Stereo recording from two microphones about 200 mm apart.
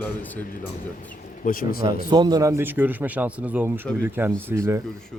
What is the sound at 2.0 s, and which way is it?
Speech, 20° right (ahead or behind).